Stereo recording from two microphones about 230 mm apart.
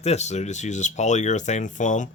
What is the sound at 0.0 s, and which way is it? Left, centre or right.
Speech, left.